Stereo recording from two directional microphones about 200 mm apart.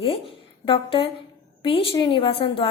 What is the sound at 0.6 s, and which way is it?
A woman's voice, 25° left (ahead or behind).